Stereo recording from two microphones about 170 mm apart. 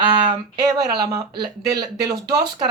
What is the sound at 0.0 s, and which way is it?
Speech, 30° right (ahead or behind).